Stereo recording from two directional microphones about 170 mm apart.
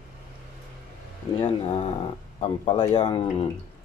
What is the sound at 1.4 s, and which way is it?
Speech, 35° left (ahead or behind).